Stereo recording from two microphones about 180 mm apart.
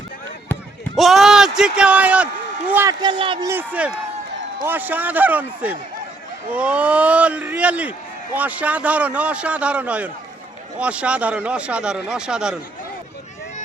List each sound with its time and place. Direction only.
0.9 s a man's voice: centre (ahead or behind)
3.0 s speech: 25° right (ahead or behind)
3.5 s speech: 10° right (ahead or behind)